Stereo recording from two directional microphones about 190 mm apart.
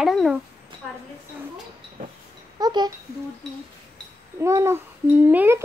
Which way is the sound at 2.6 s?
20° right (ahead or behind).